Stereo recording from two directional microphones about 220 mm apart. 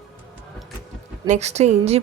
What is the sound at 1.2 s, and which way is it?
Speech, 30° right (ahead or behind).